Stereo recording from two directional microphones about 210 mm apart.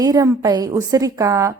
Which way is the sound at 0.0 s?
15° right (ahead or behind).